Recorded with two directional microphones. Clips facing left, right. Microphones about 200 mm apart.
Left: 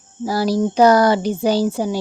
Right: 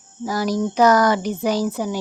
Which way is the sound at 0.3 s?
30° left (ahead or behind).